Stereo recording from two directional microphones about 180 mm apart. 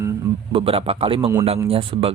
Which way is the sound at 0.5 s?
30° right (ahead or behind).